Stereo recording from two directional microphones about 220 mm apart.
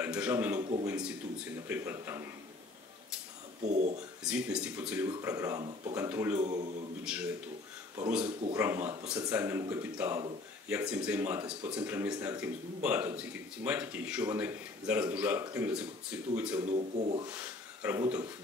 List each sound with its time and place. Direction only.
0.0 s speech: 5° right (ahead or behind)
3.6 s speech: 30° right (ahead or behind)
4.2 s speech: 5° right (ahead or behind)
6.4 s speech: 30° right (ahead or behind)
7.1 s a man's voice: 5° right (ahead or behind)
8.3 s speech: 25° right (ahead or behind)
8.5 s speech: 10° right (ahead or behind)
16.6 s speech: 30° right (ahead or behind)
17.3 s a sound: 10° right (ahead or behind)